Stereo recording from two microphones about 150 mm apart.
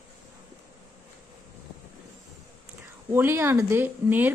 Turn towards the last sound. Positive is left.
turn(degrees=-10)  # may be behind; listen again after turning